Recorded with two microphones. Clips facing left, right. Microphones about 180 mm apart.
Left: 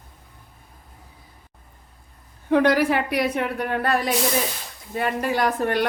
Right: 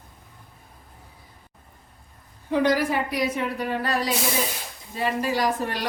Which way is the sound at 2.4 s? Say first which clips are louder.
Left 4 dB; 60° left (ahead or behind).